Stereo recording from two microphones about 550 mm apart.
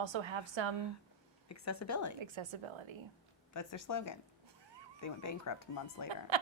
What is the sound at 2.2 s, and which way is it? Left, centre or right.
Speech, right.